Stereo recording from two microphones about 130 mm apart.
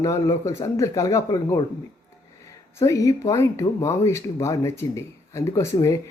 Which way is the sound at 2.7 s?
25° left (ahead or behind).